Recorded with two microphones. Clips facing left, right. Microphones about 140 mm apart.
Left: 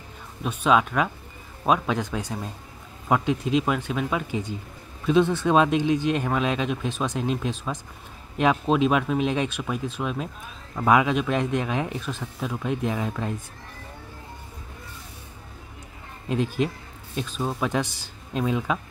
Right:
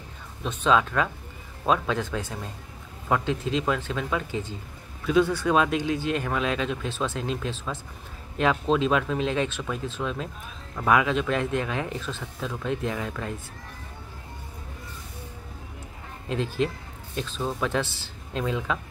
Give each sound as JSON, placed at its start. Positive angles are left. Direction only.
{"t": 0.4, "sound": "speech", "side_deg": 10}
{"t": 16.3, "sound": "a man's voice", "side_deg": 15}